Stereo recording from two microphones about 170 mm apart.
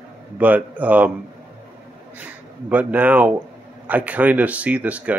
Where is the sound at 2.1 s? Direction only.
10° right (ahead or behind).